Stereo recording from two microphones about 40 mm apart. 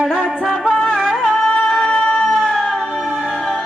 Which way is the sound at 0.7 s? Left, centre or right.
Centre.